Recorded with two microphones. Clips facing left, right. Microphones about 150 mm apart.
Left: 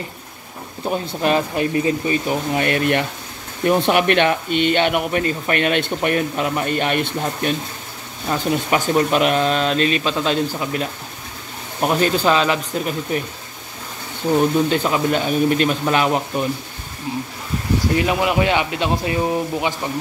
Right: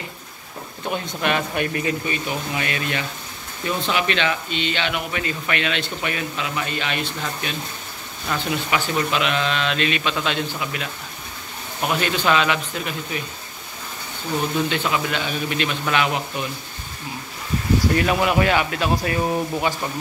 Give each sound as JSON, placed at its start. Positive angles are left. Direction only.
{"t": 0.8, "sound": "speech", "side_deg": 30}
{"t": 2.5, "sound": "speech", "side_deg": 55}
{"t": 7.2, "sound": "speech", "side_deg": 40}
{"t": 14.7, "sound": "speech", "side_deg": 40}
{"t": 17.9, "sound": "speech", "side_deg": 15}